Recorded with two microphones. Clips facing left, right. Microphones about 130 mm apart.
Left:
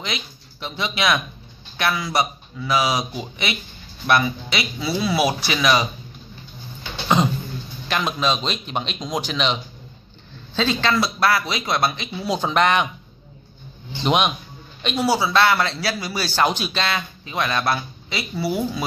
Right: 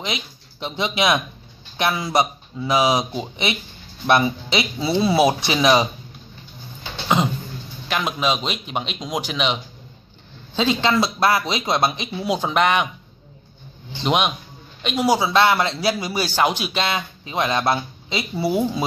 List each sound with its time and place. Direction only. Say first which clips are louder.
0.0 s a man's voice: right 2 dB; 20° right (ahead or behind)
7.9 s a man's voice: even; 10° right (ahead or behind)
12.4 s speech: left 1 dB; 5° right (ahead or behind)
14.0 s a man's voice: left 1 dB; centre (ahead or behind)
15.0 s a man's voice: right 1 dB; 20° right (ahead or behind)